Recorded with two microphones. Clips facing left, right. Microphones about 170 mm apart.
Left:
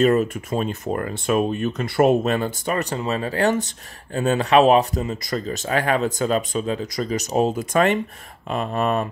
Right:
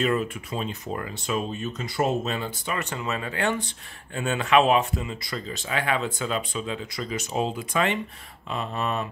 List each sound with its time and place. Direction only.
0.0 s speech: 45° left (ahead or behind)